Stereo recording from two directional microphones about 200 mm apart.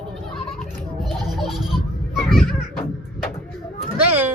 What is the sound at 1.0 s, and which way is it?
Baby laughter, centre (ahead or behind).